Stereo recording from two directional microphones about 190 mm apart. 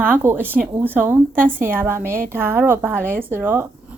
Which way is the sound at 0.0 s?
10° right (ahead or behind).